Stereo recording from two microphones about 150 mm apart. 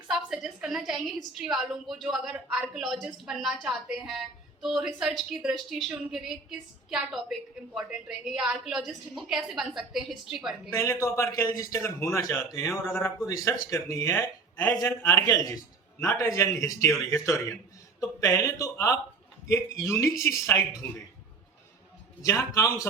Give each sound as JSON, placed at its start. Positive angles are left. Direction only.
{"t": 0.1, "sound": "a woman's voice", "side_deg": -5}
{"t": 10.7, "sound": "a man's voice", "side_deg": 20}
{"t": 22.2, "sound": "a man's voice", "side_deg": 20}